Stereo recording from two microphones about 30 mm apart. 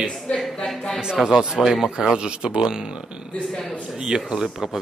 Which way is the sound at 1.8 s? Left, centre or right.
Right.